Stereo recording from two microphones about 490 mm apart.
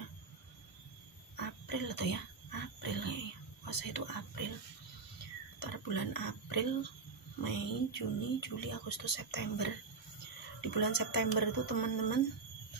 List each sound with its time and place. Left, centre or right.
1.3 s a sound: left
3.6 s speech: left
5.6 s speech: left
10.7 s speech: left